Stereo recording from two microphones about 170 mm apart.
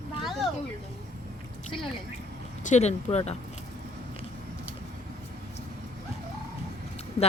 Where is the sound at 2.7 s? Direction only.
40° left (ahead or behind).